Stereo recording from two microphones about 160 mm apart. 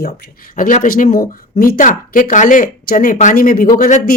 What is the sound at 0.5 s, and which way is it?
Speech, 55° left (ahead or behind).